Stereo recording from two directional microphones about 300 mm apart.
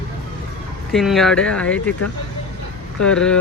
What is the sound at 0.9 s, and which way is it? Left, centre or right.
Speech, centre.